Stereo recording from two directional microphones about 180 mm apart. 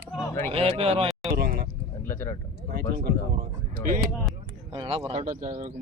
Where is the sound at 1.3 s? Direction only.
55° right (ahead or behind).